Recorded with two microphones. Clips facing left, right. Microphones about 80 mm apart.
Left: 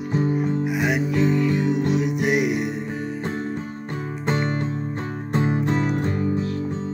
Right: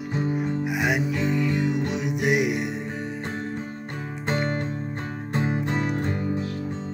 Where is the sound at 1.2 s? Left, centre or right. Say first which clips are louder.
Left 4 dB; centre.